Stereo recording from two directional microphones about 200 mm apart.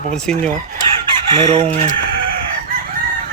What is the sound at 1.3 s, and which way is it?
Fowl, 30° right (ahead or behind).